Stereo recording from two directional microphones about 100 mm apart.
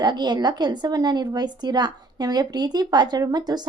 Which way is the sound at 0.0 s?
45° right (ahead or behind).